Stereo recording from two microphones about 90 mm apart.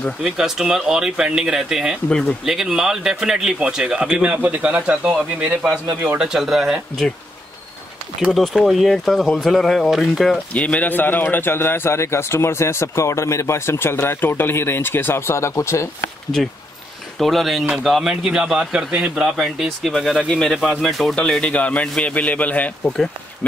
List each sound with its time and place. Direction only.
0.2 s a man's voice: 5° right (ahead or behind)
2.0 s speech: 10° left (ahead or behind)
2.4 s a man's voice: 5° right (ahead or behind)
8.3 s speech: centre (ahead or behind)
10.5 s a man's voice: 15° left (ahead or behind); by 16.1 s 35° left (ahead or behind)
17.2 s a man's voice: centre (ahead or behind)